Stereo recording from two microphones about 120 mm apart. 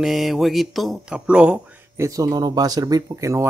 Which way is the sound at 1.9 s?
30° right (ahead or behind).